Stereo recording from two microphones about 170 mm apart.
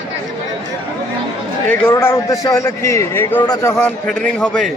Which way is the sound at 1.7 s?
15° left (ahead or behind).